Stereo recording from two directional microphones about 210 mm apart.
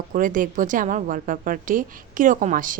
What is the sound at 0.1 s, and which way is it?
A woman's voice, 40° right (ahead or behind).